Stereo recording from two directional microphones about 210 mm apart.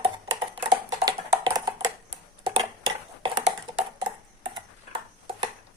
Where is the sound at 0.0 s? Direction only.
25° right (ahead or behind).